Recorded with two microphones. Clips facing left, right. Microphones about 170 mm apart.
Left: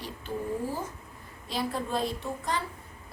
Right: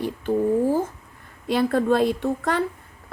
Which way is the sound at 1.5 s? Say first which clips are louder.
Right 11 dB; 65° right (ahead or behind).